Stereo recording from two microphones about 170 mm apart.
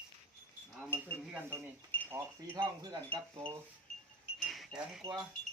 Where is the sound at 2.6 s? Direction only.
30° right (ahead or behind).